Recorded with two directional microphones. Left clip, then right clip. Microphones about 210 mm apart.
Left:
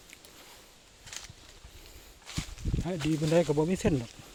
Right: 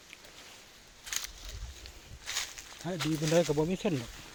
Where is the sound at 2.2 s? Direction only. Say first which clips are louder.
Right 5 dB; 50° right (ahead or behind).